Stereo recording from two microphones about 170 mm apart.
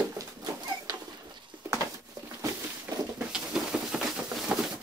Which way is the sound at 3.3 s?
5° right (ahead or behind).